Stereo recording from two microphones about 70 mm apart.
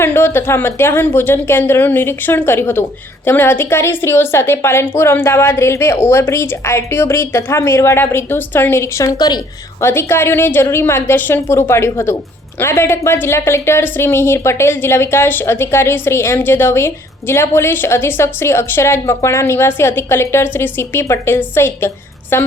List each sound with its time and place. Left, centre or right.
0.0 s a woman's voice: left
9.1 s a woman's voice: left
9.8 s a woman's voice: left